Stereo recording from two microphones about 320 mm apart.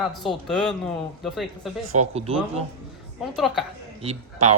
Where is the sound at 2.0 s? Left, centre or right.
Centre.